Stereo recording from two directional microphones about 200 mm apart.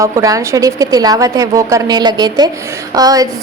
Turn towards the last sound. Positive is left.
turn(degrees=-20)  # may be behind; listen again after turning